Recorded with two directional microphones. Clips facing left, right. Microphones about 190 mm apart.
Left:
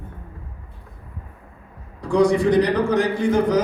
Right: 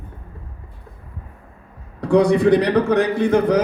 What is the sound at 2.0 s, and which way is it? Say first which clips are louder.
A man's voice: right 2 dB; 60° right (ahead or behind).